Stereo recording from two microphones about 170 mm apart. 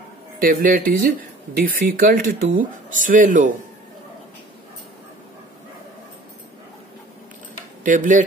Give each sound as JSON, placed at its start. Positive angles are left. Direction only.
{"t": 0.4, "sound": "speech", "side_deg": -55}
{"t": 7.8, "sound": "speech", "side_deg": -50}